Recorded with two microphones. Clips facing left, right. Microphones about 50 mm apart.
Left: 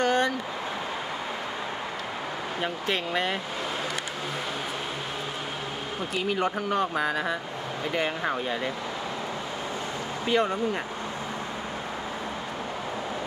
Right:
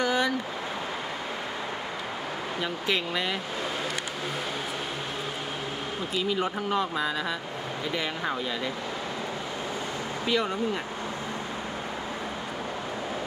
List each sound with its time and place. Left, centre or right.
0.0 s stream: left
2.6 s speech: left
6.1 s speech: left
10.3 s speech: left